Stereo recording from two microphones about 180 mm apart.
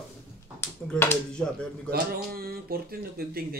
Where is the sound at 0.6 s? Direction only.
10° left (ahead or behind).